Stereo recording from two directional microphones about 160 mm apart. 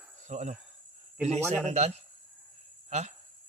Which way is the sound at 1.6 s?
45° right (ahead or behind).